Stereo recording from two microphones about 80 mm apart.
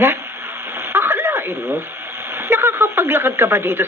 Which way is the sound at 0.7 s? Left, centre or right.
Right.